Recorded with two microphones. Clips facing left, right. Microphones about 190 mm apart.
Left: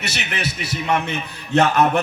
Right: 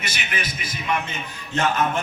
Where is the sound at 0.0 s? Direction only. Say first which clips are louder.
Left 4 dB; 70° left (ahead or behind).